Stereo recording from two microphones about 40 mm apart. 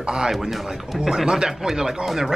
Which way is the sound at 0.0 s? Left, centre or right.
Centre.